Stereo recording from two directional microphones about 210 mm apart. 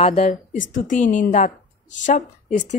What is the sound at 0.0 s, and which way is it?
A woman's voice, 30° left (ahead or behind).